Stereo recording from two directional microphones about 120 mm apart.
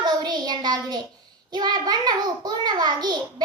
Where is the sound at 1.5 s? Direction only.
35° right (ahead or behind).